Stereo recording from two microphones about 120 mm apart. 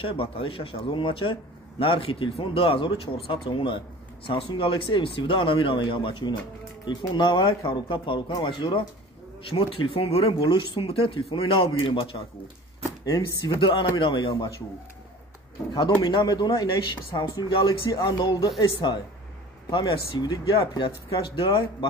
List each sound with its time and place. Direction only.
0.0 s a man's voice: 50° left (ahead or behind)
13.6 s a man's voice: 45° left (ahead or behind)
15.7 s a man's voice: 40° left (ahead or behind)